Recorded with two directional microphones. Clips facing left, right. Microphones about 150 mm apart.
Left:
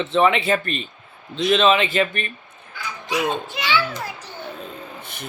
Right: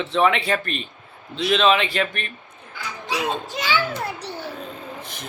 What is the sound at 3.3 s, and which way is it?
Speech, 40° right (ahead or behind).